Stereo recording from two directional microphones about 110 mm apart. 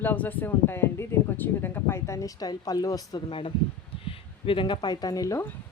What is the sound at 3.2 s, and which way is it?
A woman's voice, 50° left (ahead or behind).